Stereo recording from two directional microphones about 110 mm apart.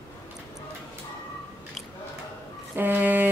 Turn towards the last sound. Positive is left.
turn(degrees=-15)  # may be behind; listen again after turning